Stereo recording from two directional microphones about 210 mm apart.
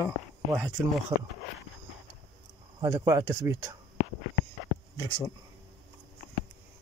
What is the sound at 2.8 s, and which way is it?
Speech, 15° right (ahead or behind).